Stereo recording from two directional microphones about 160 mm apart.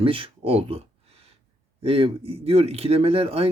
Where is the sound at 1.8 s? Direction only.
35° right (ahead or behind).